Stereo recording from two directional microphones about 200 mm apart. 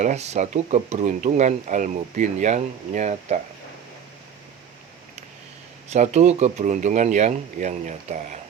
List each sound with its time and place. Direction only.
0.0 s speech: 35° right (ahead or behind)
5.9 s speech: 35° right (ahead or behind)